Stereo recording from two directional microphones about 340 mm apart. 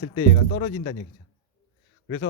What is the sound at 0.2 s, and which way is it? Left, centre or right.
Speech, left.